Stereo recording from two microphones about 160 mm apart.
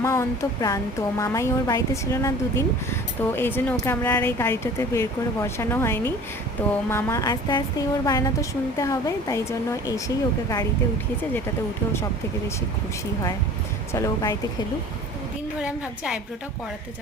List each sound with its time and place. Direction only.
0.0 s a woman's voice: 15° left (ahead or behind)
13.9 s a woman's voice: 20° left (ahead or behind)
15.6 s a woman's voice: 5° right (ahead or behind)